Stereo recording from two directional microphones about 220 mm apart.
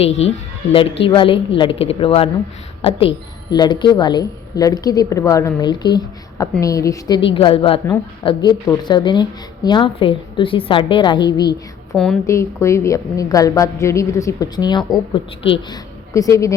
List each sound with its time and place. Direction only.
0.2 s a woman's voice: 25° left (ahead or behind)
3.5 s a woman's voice: 20° left (ahead or behind)
11.9 s a woman's voice: centre (ahead or behind)
12.2 s a woman's voice: 15° left (ahead or behind)